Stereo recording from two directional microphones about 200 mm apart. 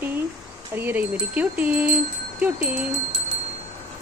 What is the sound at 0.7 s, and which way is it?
Speech, 10° right (ahead or behind).